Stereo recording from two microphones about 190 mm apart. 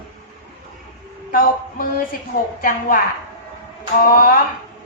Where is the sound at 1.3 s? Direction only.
50° left (ahead or behind).